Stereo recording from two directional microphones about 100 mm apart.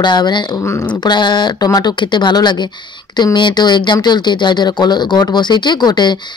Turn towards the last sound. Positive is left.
turn(degrees=45)  # may be behind; listen again after turning